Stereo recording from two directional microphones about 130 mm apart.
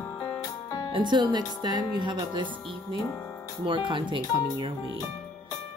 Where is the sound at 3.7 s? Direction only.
40° right (ahead or behind).